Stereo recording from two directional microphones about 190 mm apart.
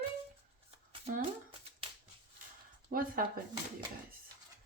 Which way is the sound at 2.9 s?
50° right (ahead or behind).